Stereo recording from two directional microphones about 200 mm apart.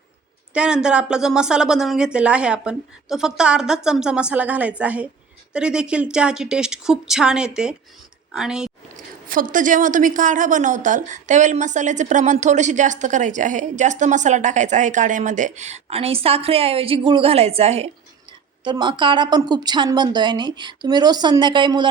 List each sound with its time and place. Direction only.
0.5 s speech: 5° right (ahead or behind)
9.2 s a woman's voice: 45° right (ahead or behind); by 21.8 s 25° right (ahead or behind)